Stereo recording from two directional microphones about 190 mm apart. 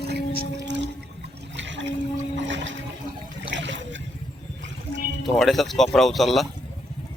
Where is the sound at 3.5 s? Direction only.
70° right (ahead or behind).